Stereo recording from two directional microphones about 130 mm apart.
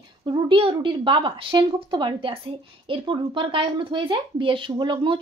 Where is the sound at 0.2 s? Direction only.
40° right (ahead or behind).